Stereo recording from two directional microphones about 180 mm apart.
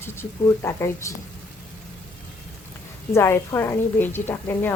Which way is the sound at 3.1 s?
15° left (ahead or behind).